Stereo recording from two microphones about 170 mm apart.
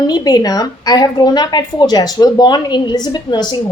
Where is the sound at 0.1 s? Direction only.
25° left (ahead or behind).